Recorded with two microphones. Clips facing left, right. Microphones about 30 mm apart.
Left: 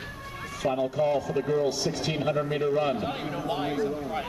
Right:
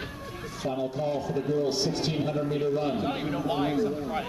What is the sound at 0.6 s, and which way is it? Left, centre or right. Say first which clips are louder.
Speech: left 4 dB; left.